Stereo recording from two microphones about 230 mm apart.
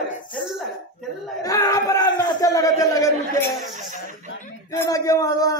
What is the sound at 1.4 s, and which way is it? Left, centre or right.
Speech, centre.